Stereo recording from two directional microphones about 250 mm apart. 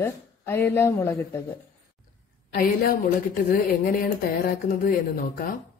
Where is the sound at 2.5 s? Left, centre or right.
Left.